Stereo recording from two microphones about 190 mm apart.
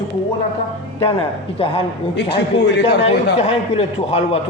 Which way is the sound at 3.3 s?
35° left (ahead or behind).